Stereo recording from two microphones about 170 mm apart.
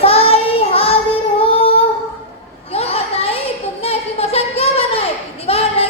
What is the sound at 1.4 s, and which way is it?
Singing, 35° left (ahead or behind).